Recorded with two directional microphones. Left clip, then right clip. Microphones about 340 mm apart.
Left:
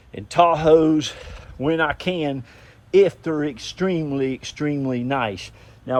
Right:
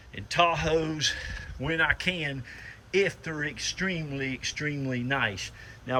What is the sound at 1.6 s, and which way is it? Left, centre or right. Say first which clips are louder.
Speech: left 10 dB; left.